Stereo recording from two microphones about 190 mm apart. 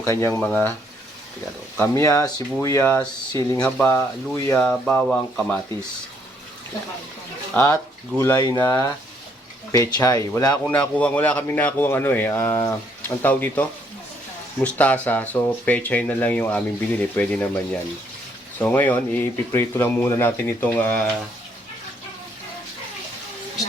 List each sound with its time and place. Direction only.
0.0 s speech: 15° left (ahead or behind)
1.9 s speech: 15° left (ahead or behind)
7.5 s speech: 10° left (ahead or behind)
10.5 s speech: 5° left (ahead or behind)
18.6 s speech: 10° left (ahead or behind)